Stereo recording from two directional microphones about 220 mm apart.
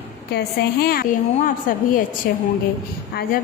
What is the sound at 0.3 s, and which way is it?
A woman's voice, 45° left (ahead or behind).